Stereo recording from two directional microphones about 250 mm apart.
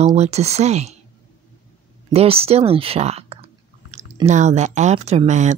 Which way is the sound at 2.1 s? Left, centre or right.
Right.